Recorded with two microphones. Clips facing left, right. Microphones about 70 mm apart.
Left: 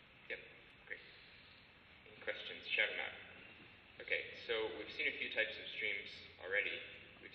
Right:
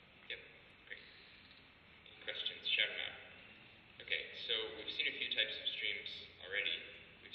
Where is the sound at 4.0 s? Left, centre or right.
Left.